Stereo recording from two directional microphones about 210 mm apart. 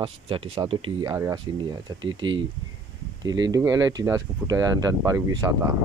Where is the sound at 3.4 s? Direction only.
20° right (ahead or behind).